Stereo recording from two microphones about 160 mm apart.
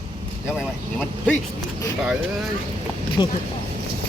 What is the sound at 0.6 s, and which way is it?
Speech, 5° left (ahead or behind).